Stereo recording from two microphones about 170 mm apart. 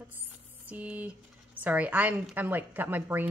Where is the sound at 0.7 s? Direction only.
10° right (ahead or behind).